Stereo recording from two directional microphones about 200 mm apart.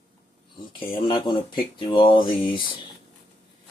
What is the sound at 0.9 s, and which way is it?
Speech, 25° left (ahead or behind).